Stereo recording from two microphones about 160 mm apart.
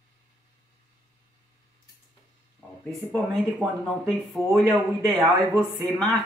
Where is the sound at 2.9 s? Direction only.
Centre (ahead or behind).